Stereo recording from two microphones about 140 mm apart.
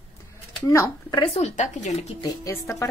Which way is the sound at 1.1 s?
50° left (ahead or behind).